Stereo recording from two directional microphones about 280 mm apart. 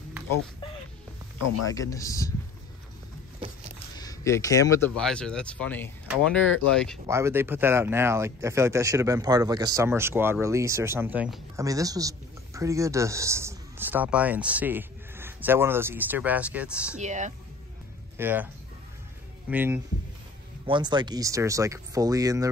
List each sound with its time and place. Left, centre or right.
1.7 s speech: centre
3.9 s speech: centre
7.1 s speech: centre
17.0 s speech: right
18.1 s speech: centre
19.5 s speech: centre